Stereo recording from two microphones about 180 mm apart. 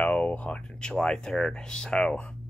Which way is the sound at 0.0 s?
5° left (ahead or behind).